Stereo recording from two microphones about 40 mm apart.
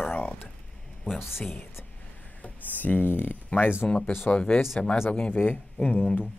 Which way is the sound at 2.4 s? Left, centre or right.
Left.